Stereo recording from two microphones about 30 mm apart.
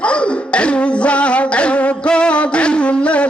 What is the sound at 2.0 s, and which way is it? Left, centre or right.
Music, left.